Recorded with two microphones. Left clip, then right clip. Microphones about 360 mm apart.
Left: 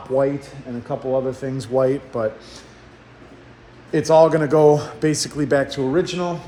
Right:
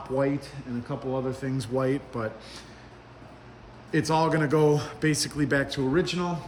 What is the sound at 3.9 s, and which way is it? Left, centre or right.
Speech, centre.